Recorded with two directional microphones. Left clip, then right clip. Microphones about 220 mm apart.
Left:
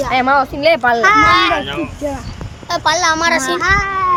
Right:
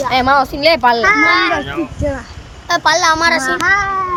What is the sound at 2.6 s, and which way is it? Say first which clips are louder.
Speech: right 2 dB; 35° right (ahead or behind).